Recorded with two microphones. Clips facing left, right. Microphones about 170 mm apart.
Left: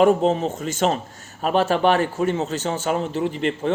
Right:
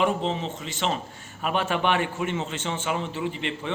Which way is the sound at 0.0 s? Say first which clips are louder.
Left 8 dB; 45° left (ahead or behind).